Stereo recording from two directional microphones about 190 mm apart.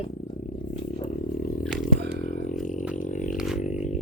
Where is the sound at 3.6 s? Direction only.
40° left (ahead or behind).